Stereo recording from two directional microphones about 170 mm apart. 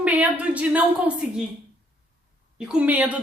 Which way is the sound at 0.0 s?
10° right (ahead or behind).